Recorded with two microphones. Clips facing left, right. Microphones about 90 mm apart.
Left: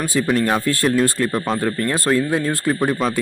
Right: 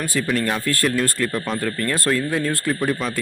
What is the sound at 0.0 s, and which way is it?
Speech, 20° left (ahead or behind).